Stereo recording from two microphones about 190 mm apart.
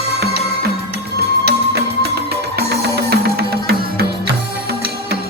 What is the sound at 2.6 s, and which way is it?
Music, 60° right (ahead or behind).